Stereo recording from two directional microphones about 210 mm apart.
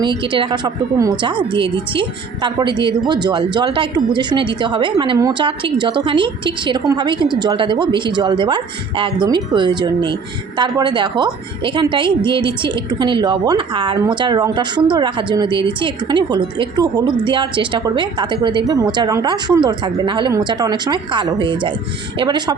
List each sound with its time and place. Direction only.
0.2 s a woman's voice: 25° right (ahead or behind)